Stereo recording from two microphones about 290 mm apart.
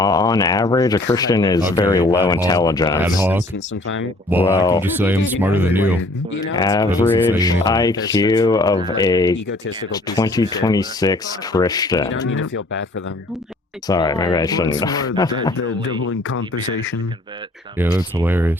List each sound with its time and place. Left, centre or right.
0.0 s speech: centre
4.4 s speech: centre
4.8 s speech: centre
6.5 s speech: centre
12.3 s speech: left
13.8 s speech: centre
16.0 s speech: left
17.7 s speech: centre